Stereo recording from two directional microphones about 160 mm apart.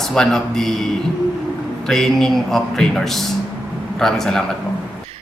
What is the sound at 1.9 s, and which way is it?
A man's voice, centre (ahead or behind).